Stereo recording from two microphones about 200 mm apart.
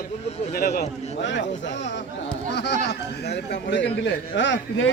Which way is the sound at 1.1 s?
60° left (ahead or behind).